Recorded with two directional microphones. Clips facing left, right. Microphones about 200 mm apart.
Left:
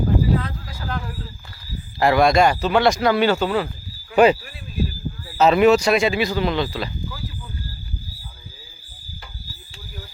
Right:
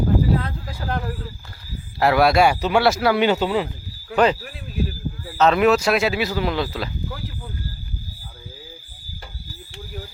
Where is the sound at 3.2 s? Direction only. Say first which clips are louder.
Even; 20° right (ahead or behind).